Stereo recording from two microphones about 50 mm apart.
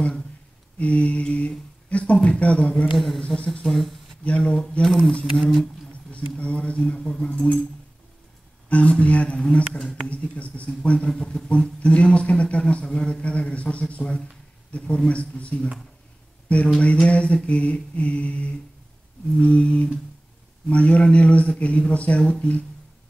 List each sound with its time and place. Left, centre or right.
0.7 s speech: left
2.9 s speech: centre
4.5 s speech: left
4.8 s speech: centre
6.1 s speech: left
7.2 s speech: left
8.6 s speech: left
11.1 s speech: centre